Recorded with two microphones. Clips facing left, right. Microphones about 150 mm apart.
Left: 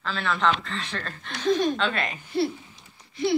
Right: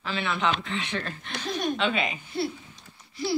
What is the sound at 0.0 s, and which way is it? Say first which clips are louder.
A woman's voice: left 2 dB; 10° right (ahead or behind).